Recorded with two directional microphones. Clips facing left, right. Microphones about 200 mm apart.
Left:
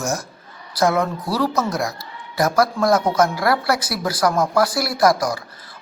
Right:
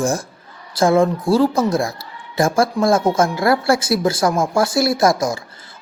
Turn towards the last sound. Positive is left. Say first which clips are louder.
# right 1 dB
turn(degrees=-25)  # may be behind; listen again after turning